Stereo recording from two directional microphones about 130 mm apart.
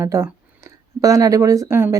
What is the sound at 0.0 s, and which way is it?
Speech, 25° right (ahead or behind).